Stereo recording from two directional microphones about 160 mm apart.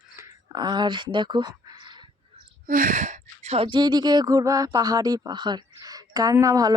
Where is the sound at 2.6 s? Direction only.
60° right (ahead or behind).